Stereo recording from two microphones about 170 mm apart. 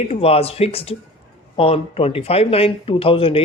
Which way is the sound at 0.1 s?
35° left (ahead or behind).